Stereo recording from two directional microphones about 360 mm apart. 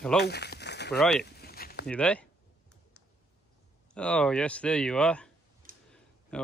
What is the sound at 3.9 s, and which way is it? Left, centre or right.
Speech, centre.